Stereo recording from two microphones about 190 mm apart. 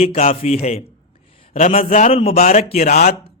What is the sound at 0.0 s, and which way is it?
A man's voice, 35° left (ahead or behind).